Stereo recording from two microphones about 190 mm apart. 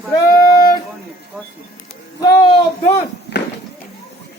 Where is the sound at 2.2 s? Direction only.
25° left (ahead or behind).